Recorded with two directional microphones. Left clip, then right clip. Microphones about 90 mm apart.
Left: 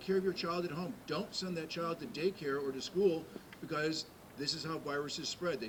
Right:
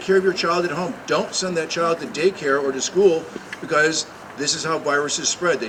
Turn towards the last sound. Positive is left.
turn(degrees=-25)  # may be behind; listen again after turning